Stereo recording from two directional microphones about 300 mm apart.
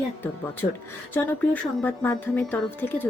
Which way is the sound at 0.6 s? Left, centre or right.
Left.